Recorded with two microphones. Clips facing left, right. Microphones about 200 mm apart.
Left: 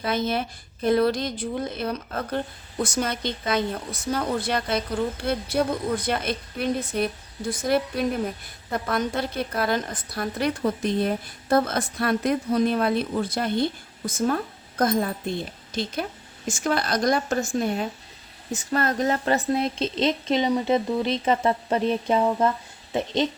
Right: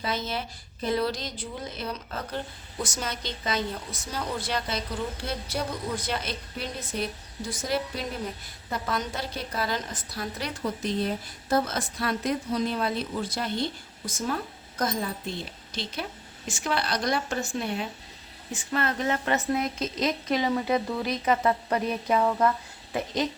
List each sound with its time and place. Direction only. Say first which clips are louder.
0.0 s a woman's voice: left 6 dB; 55° left (ahead or behind); by 23.3 s 25° left (ahead or behind)